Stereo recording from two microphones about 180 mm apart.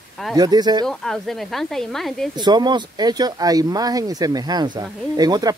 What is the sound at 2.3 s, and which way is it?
Speech, 25° right (ahead or behind).